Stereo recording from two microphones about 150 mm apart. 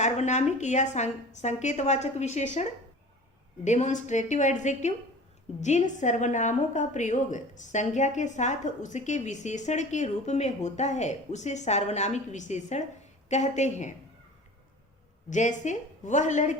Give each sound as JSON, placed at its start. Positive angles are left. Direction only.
{"t": 0.0, "sound": "a woman's voice", "side_deg": 50}
{"t": 15.3, "sound": "a woman's voice", "side_deg": 55}